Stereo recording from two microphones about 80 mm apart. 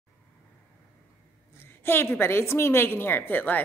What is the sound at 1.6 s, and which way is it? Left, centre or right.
A woman's voice, left.